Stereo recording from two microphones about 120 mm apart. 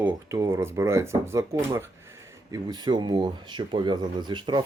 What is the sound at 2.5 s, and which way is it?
Speech, 35° right (ahead or behind).